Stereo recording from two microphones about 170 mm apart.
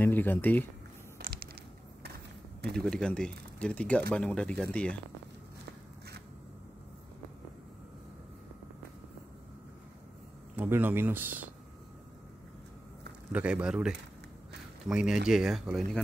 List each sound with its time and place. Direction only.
0.0 s speech: 10° left (ahead or behind)
1.1 s a sound: 65° right (ahead or behind)
2.7 s speech: 5° left (ahead or behind)
10.5 s a man's voice: 10° right (ahead or behind)
13.3 s a man's voice: 5° right (ahead or behind)